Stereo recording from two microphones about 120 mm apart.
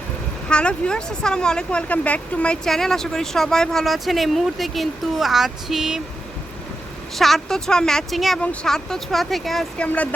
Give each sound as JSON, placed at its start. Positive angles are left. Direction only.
{"t": 0.4, "sound": "speech", "side_deg": 10}
{"t": 7.2, "sound": "speech", "side_deg": 0}
{"t": 9.8, "sound": "speech", "side_deg": 10}